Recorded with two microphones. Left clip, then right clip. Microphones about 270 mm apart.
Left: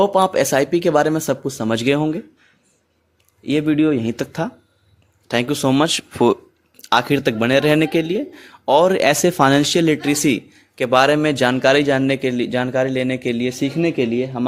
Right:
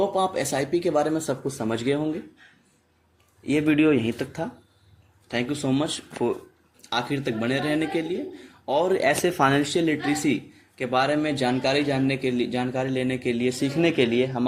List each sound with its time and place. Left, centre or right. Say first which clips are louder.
0.0 s speech: left 8 dB; left
3.4 s speech: left 3 dB; left